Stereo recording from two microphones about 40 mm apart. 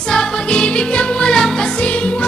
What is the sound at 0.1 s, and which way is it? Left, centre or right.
Music, left.